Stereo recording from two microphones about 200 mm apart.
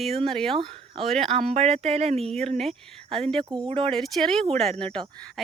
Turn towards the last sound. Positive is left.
turn(degrees=-25)  # may be behind; listen again after turning